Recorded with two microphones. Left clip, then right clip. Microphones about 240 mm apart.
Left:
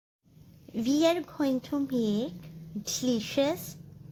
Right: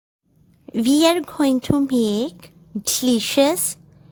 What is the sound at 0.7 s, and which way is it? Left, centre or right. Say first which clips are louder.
A woman's voice: right 9 dB; right.